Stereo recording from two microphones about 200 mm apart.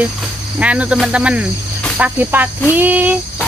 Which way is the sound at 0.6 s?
5° right (ahead or behind).